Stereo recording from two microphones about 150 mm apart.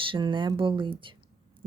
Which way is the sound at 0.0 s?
35° right (ahead or behind).